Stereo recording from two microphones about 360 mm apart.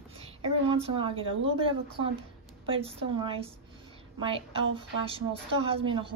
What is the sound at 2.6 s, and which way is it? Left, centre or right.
A woman's voice, centre.